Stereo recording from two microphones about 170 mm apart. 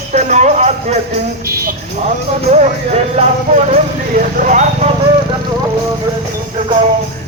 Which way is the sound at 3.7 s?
50° right (ahead or behind).